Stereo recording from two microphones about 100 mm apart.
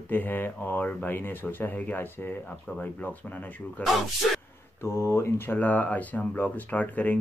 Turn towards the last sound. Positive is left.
turn(degrees=15)  # may be behind; listen again after turning